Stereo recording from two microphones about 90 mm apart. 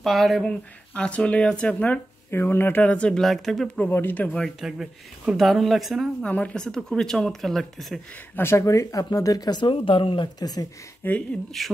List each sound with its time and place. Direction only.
0.0 s speech: centre (ahead or behind)
2.3 s speech: 25° left (ahead or behind); by 3.9 s 10° left (ahead or behind)
3.9 s speech: 20° left (ahead or behind)
4.6 s speech: 5° right (ahead or behind)
6.2 s speech: 15° left (ahead or behind)
8.4 s speech: 30° left (ahead or behind); by 10.3 s 70° left (ahead or behind)
10.4 s speech: 45° left (ahead or behind)
11.0 s speech: 20° left (ahead or behind)
11.6 s speech: centre (ahead or behind)